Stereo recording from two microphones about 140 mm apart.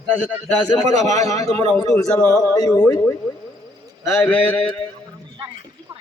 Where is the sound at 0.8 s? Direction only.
55° right (ahead or behind).